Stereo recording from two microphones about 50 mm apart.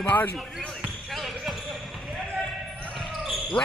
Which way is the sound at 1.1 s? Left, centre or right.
Centre.